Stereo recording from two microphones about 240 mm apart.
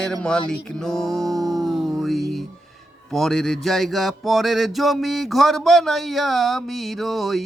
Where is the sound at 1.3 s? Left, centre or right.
Centre.